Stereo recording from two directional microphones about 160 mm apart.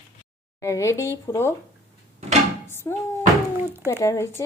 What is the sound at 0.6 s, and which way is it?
Speech, 20° left (ahead or behind).